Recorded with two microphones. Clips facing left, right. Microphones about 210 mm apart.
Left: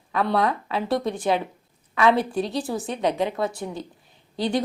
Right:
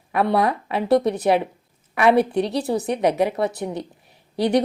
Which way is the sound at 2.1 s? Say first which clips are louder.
Right 5 dB; 65° right (ahead or behind).